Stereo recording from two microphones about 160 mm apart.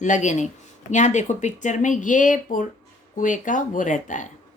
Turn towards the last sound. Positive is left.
turn(degrees=50)  # may be behind; listen again after turning